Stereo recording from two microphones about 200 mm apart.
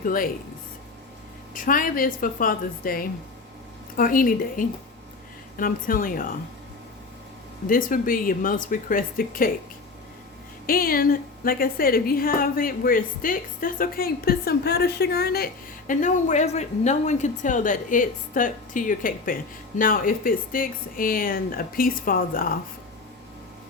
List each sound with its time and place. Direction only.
0.0 s a woman's voice: 45° left (ahead or behind)
1.5 s a woman's voice: 45° left (ahead or behind)
7.7 s a woman's voice: 45° left (ahead or behind)
10.7 s a woman's voice: 45° left (ahead or behind)
15.9 s a woman's voice: 40° left (ahead or behind)